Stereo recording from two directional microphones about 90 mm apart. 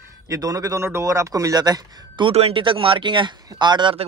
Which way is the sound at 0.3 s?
40° right (ahead or behind).